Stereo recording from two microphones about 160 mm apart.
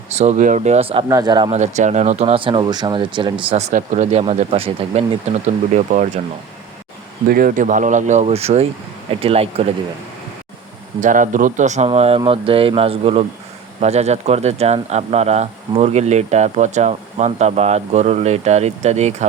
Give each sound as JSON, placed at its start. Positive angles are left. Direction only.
{"t": 0.2, "sound": "speech", "side_deg": -50}
{"t": 1.0, "sound": "speech", "side_deg": -25}
{"t": 1.5, "sound": "speech", "side_deg": -45}
{"t": 3.7, "sound": "speech", "side_deg": -55}
{"t": 5.7, "sound": "speech", "side_deg": -50}
{"t": 7.3, "sound": "speech", "side_deg": -65}
{"t": 11.0, "sound": "speech", "side_deg": -55}